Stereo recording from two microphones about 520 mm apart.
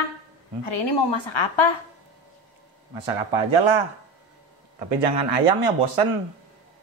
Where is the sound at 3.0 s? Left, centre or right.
Right.